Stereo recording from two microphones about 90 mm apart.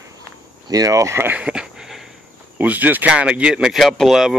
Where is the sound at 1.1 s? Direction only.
25° right (ahead or behind).